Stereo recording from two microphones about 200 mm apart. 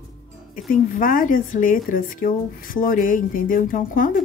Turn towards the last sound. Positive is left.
turn(degrees=45)  # may be behind; listen again after turning